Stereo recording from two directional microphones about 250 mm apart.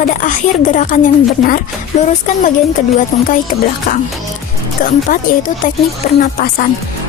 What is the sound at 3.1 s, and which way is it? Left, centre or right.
Speech, left.